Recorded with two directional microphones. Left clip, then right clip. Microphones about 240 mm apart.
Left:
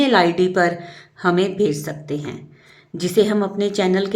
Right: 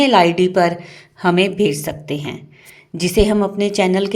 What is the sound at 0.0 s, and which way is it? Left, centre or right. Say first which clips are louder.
A woman's voice: right 3 dB; right.